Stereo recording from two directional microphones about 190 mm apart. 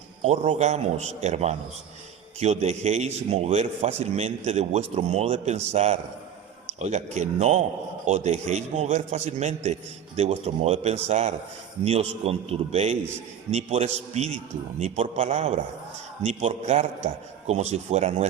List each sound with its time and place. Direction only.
0.2 s speech: 35° right (ahead or behind)